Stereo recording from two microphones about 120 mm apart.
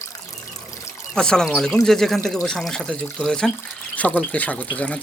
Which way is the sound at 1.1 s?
5° left (ahead or behind).